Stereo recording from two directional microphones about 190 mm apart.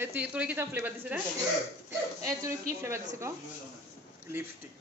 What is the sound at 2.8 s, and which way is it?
Speech, 15° right (ahead or behind).